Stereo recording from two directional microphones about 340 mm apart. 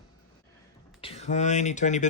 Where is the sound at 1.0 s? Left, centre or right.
Centre.